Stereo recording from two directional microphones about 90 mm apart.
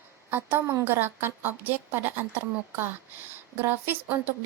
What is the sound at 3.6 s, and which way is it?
Speech, 20° right (ahead or behind).